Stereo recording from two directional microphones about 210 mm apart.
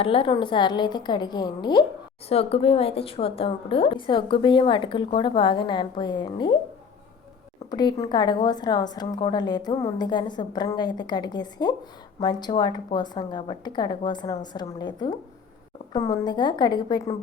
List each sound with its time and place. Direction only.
0.0 s a woman's voice: 25° left (ahead or behind)
7.7 s a woman's voice: 20° left (ahead or behind)